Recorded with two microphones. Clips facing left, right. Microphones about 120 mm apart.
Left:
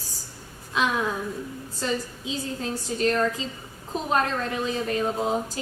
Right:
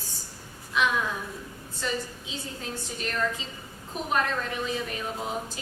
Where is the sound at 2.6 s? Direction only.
35° left (ahead or behind).